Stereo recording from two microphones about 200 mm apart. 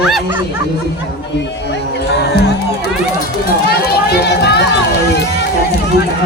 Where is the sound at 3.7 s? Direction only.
55° left (ahead or behind).